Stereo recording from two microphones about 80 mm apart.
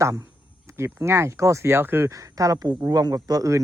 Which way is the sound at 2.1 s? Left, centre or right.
Right.